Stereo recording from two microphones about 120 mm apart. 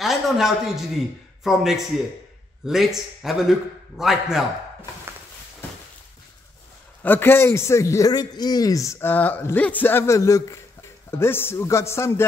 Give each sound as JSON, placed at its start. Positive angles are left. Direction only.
{"t": 0.0, "sound": "a man's voice", "side_deg": -5}
{"t": 7.0, "sound": "a man's voice", "side_deg": 15}